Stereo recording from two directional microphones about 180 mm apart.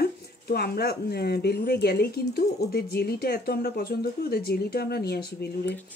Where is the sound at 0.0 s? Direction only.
60° left (ahead or behind).